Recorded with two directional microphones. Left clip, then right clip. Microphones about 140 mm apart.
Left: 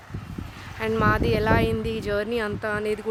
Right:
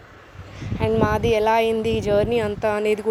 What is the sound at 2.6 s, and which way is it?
Speech, 30° right (ahead or behind).